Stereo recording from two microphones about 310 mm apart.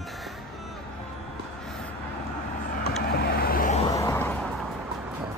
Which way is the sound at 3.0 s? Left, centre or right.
Left.